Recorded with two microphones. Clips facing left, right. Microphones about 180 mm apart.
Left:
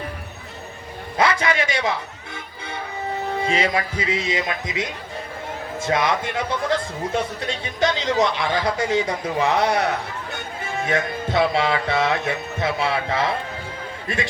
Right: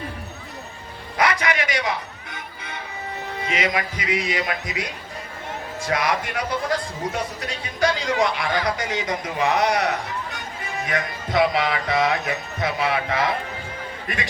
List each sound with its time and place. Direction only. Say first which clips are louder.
1.2 s speech: left 2 dB; 25° left (ahead or behind)